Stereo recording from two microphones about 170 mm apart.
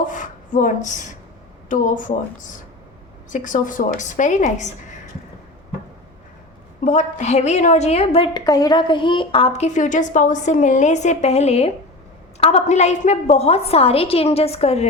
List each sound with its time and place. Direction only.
0.0 s a woman's voice: 50° left (ahead or behind)
3.2 s a woman's voice: 50° left (ahead or behind)
6.8 s a woman's voice: 45° left (ahead or behind)